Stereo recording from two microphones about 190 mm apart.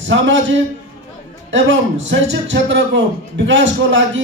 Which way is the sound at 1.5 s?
75° right (ahead or behind).